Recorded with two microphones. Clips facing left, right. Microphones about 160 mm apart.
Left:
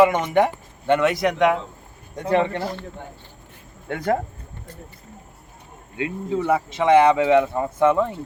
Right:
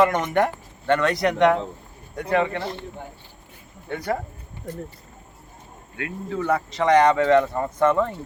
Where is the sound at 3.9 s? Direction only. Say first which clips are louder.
Left 4 dB; 50° left (ahead or behind).